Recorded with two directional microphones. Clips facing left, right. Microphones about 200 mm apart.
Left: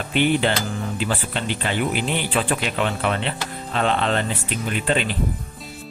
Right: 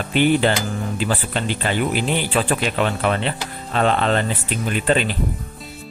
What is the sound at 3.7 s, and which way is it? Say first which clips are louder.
Speech: right 3 dB; 45° right (ahead or behind).